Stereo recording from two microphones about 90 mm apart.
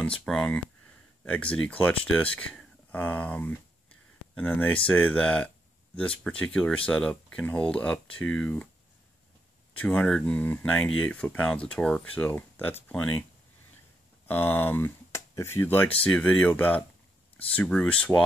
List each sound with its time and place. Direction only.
0.2 s speech: 10° left (ahead or behind)
9.8 s speech: 15° left (ahead or behind)
14.2 s speech: 25° left (ahead or behind)